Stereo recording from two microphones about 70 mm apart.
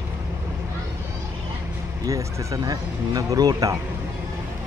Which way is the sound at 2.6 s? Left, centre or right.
Right.